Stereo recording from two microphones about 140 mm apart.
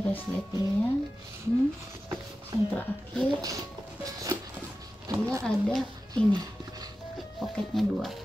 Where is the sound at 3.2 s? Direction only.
5° left (ahead or behind).